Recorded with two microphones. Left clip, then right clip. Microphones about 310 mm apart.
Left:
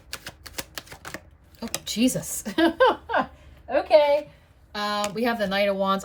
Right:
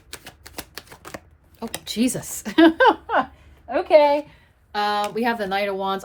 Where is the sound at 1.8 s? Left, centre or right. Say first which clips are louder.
Even; right.